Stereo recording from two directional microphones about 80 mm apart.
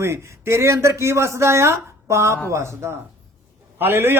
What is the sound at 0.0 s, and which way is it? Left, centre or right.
Speech, right.